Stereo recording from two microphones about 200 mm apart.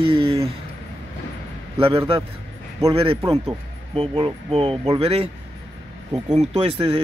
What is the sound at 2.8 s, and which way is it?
Speech, 25° right (ahead or behind).